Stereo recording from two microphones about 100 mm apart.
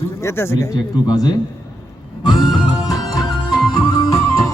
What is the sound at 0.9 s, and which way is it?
Speech, 40° left (ahead or behind).